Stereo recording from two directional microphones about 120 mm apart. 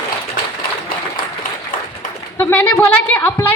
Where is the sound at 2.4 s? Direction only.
15° left (ahead or behind).